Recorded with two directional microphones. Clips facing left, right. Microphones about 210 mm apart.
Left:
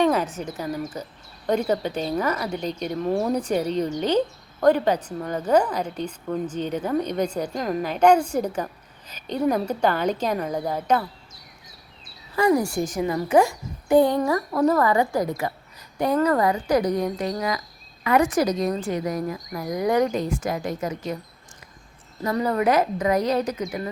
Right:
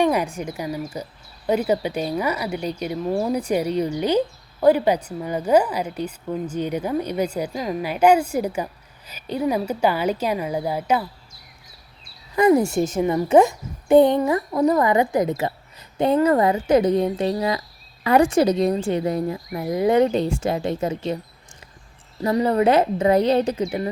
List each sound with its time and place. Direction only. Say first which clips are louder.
0.0 s speech: right 1 dB; 10° right (ahead or behind)
12.4 s a woman's voice: right 4 dB; 20° right (ahead or behind)
22.2 s a woman's voice: right 4 dB; 25° right (ahead or behind)